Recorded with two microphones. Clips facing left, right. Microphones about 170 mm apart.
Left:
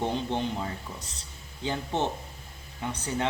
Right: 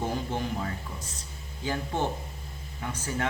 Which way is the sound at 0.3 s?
25° left (ahead or behind).